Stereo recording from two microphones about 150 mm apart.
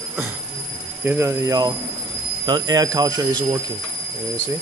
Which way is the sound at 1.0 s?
15° right (ahead or behind).